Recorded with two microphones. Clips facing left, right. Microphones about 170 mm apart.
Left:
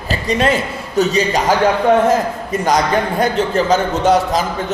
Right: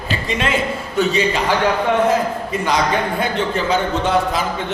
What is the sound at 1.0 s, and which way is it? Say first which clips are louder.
Speech: left 3 dB; 40° left (ahead or behind).